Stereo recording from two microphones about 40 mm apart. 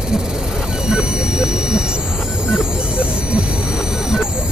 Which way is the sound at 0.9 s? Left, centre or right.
Centre.